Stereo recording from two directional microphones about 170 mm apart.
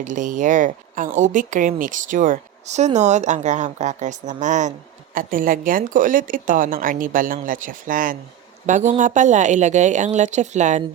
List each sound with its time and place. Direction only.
0.0 s speech: 50° right (ahead or behind)